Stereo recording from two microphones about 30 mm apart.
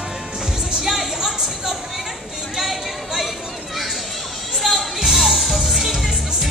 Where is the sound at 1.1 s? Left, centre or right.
Centre.